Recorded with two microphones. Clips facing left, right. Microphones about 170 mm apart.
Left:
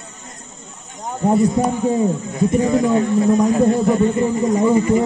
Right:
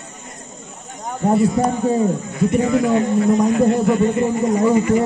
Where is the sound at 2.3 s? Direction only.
35° left (ahead or behind).